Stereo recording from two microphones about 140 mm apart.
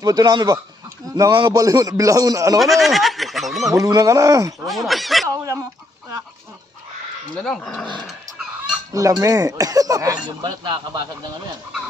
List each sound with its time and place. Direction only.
0.0 s a man's voice: 25° right (ahead or behind)
2.6 s speech: centre (ahead or behind)
3.7 s a man's voice: 25° right (ahead or behind)
4.6 s speech: centre (ahead or behind)
5.3 s a man's voice: 25° right (ahead or behind)
7.3 s speech: 5° left (ahead or behind)
8.9 s a man's voice: 25° right (ahead or behind)